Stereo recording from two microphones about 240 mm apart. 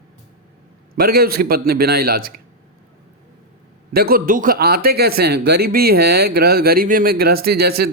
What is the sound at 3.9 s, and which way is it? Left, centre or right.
Speech, right.